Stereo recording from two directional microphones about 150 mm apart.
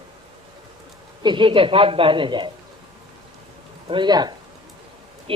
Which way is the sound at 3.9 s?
30° right (ahead or behind).